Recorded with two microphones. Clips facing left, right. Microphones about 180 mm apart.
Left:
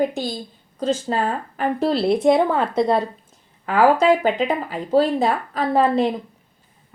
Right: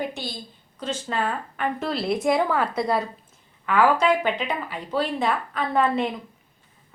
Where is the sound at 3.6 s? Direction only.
35° left (ahead or behind).